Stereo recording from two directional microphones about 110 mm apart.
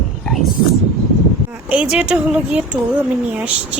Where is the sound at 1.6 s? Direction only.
10° right (ahead or behind).